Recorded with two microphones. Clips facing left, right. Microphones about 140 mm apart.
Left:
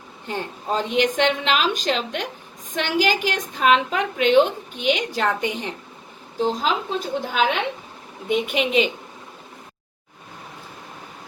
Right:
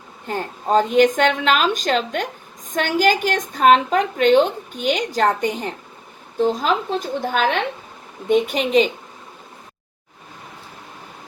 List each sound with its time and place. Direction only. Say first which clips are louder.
0.3 s a woman's voice: right 5 dB; 45° right (ahead or behind)